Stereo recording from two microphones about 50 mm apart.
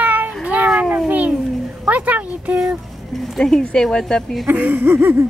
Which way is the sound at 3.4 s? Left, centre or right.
Centre.